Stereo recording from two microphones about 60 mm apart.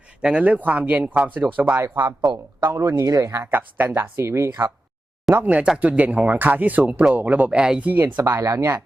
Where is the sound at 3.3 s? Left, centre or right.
Right.